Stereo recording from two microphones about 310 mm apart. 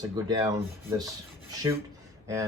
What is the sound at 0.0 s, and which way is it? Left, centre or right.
Speech, centre.